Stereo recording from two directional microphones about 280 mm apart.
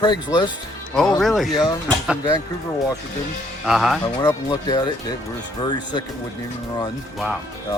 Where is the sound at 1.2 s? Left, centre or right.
Centre.